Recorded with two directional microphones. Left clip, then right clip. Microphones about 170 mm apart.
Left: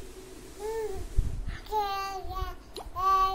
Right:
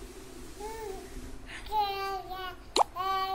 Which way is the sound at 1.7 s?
20° left (ahead or behind).